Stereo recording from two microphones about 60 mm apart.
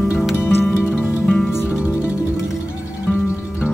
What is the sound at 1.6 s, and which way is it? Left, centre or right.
Music, centre.